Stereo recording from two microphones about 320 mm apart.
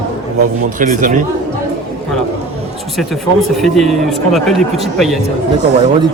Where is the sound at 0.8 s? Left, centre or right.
Right.